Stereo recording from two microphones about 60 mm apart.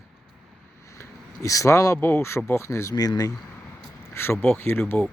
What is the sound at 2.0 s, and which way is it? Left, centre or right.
Speech, left.